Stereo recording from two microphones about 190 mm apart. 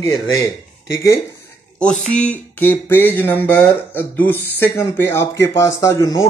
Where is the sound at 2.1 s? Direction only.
5° left (ahead or behind).